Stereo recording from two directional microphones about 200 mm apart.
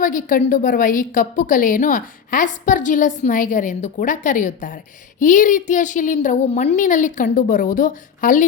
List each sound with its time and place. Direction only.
0.0 s a woman's voice: 40° left (ahead or behind)